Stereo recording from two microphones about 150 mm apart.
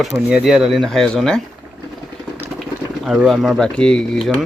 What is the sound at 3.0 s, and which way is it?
Speech, centre (ahead or behind).